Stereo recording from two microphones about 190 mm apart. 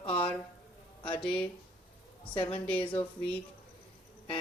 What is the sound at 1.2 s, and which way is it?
Speech, 5° left (ahead or behind).